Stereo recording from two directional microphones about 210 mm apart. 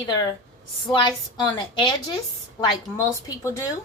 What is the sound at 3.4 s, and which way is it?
Speech, 15° left (ahead or behind).